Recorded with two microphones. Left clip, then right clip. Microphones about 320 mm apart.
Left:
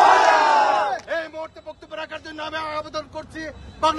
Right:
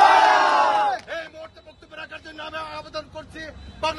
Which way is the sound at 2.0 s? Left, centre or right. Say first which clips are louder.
Left 3 dB; centre.